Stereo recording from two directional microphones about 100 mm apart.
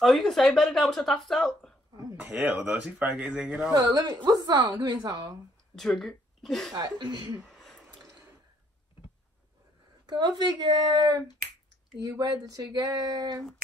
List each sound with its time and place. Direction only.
0.0 s a woman's voice: centre (ahead or behind)
2.1 s speech: 15° right (ahead or behind)
3.7 s a woman's voice: 40° right (ahead or behind)
5.8 s speech: 5° left (ahead or behind)
6.7 s speech: 45° right (ahead or behind)
7.3 s a sound: centre (ahead or behind)
10.0 s a woman's voice: 45° right (ahead or behind)